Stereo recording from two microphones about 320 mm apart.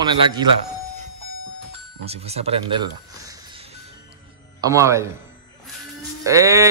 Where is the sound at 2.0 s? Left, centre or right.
Centre.